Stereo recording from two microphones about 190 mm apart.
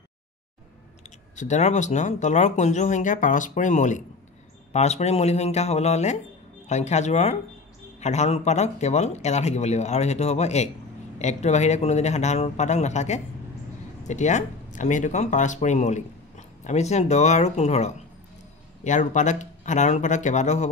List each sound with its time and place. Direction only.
1.3 s speech: 40° left (ahead or behind)